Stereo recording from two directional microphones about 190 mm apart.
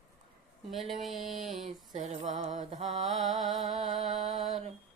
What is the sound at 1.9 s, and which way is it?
Music, 40° right (ahead or behind).